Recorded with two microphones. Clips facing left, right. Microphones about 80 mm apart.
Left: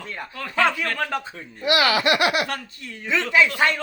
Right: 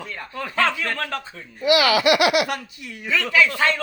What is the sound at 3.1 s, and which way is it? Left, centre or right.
Speech, left.